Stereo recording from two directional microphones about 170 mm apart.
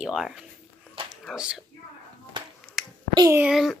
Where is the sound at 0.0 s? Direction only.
Centre (ahead or behind).